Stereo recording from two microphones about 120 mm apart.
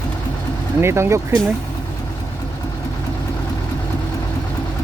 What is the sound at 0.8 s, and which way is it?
Speech, 20° right (ahead or behind).